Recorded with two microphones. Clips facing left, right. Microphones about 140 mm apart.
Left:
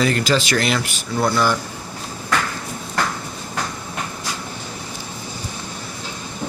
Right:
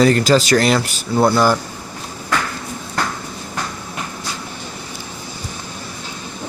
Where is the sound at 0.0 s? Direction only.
40° right (ahead or behind).